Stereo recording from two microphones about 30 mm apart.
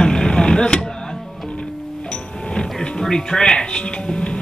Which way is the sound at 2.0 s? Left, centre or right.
Left.